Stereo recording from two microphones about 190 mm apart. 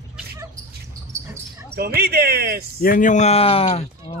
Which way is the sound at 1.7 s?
55° right (ahead or behind).